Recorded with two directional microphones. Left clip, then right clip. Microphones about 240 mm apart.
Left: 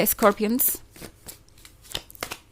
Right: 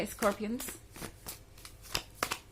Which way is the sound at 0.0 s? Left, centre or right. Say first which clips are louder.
Left 12 dB; left.